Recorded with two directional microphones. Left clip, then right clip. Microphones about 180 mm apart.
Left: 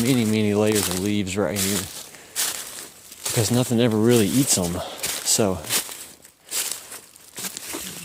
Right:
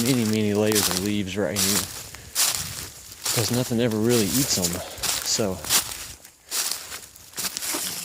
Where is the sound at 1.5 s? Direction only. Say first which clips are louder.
Right 1 dB; 20° right (ahead or behind).